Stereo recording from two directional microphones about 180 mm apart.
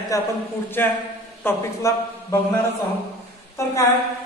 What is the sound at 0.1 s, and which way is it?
A man's voice, 20° left (ahead or behind).